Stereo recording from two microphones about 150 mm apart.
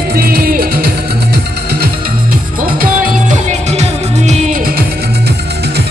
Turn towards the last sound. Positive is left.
turn(degrees=-70)  # may be behind; listen again after turning